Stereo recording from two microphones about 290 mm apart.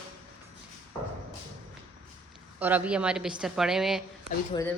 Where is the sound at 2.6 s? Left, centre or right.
Centre.